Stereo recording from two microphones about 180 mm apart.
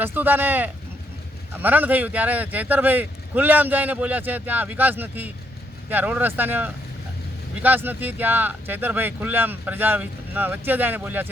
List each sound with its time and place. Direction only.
0.0 s speech: 10° right (ahead or behind)